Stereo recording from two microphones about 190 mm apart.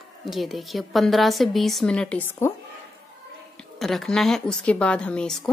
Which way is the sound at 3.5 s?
Centre (ahead or behind).